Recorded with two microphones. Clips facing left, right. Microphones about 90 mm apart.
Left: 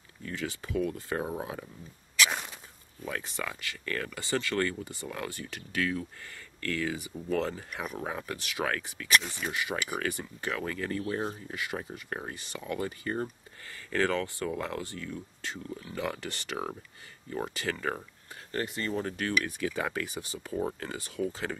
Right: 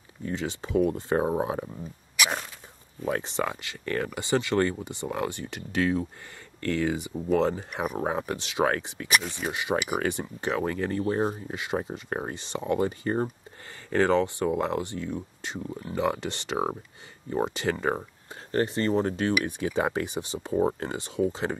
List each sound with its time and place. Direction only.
0.2 s speech: 25° right (ahead or behind)
3.1 s speech: 25° right (ahead or behind)
8.0 s speech: 30° right (ahead or behind)
18.5 s speech: 35° right (ahead or behind)